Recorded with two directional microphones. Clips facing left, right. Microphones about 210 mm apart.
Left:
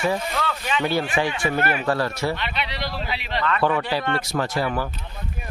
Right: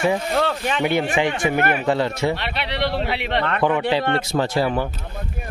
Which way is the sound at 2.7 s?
65° right (ahead or behind).